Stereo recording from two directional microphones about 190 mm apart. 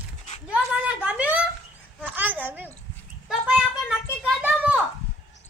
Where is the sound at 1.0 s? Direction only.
5° right (ahead or behind).